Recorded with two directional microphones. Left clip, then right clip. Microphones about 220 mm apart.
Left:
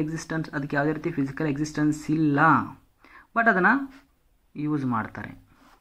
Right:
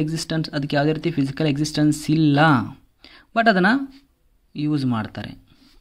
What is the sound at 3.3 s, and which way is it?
Speech, 60° right (ahead or behind).